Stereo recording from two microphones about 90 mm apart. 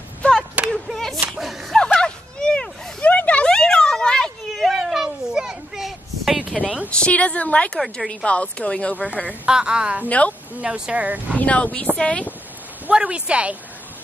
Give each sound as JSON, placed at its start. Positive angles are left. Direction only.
{"t": 0.2, "sound": "a sound", "side_deg": 15}
{"t": 6.9, "sound": "speech", "side_deg": 15}
{"t": 9.3, "sound": "a woman's voice", "side_deg": -10}
{"t": 10.0, "sound": "speech", "side_deg": 15}
{"t": 10.6, "sound": "a woman's voice", "side_deg": -15}
{"t": 11.3, "sound": "speech", "side_deg": 15}
{"t": 12.8, "sound": "speech", "side_deg": -15}